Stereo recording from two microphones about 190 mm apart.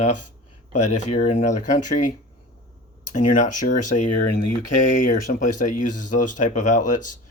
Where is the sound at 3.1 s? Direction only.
40° left (ahead or behind).